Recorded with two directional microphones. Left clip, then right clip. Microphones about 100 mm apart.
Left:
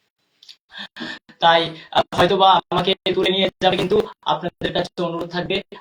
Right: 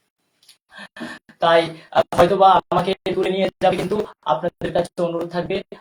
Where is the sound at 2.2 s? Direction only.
30° right (ahead or behind).